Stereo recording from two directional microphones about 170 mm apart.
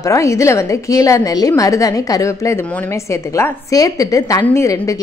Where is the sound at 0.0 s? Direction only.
20° left (ahead or behind).